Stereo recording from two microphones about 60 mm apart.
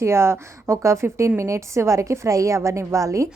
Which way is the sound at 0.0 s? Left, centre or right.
Right.